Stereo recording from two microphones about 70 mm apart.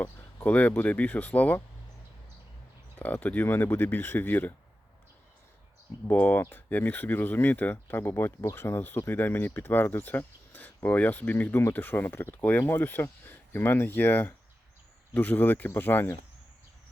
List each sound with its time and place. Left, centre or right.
0.4 s speech: left
3.0 s speech: left
6.1 s speech: left